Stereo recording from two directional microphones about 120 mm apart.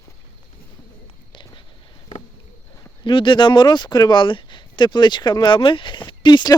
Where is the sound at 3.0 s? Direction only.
45° left (ahead or behind).